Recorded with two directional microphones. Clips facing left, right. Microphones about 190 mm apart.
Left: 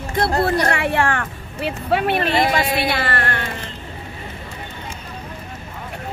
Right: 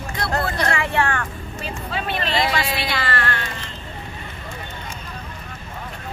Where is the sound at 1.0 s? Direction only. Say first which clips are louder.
Left 3 dB; 60° left (ahead or behind).